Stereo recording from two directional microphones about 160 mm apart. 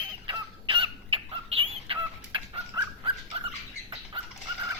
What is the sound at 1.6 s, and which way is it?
Dog, 30° right (ahead or behind).